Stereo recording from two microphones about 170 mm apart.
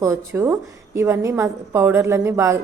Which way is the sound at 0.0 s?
15° right (ahead or behind).